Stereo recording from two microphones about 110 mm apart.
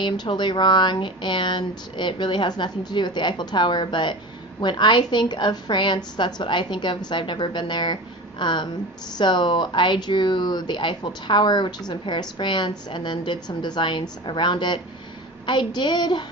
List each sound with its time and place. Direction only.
0.0 s speech: 45° left (ahead or behind)